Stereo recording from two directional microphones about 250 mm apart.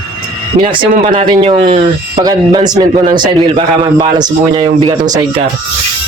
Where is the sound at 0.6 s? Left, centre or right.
Right.